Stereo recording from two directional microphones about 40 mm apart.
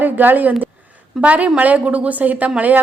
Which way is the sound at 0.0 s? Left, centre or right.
Right.